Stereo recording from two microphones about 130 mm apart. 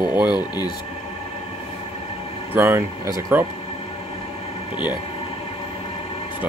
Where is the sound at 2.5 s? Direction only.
15° right (ahead or behind).